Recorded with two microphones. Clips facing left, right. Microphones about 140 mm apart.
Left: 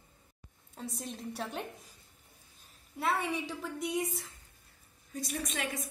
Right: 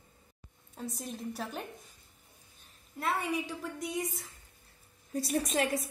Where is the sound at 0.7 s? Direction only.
Centre (ahead or behind).